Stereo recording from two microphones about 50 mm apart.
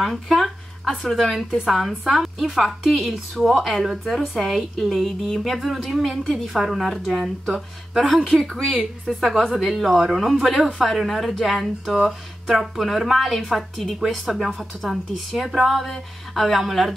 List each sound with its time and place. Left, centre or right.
0.0 s a sound: centre
1.1 s a woman's voice: centre
8.4 s a woman's voice: centre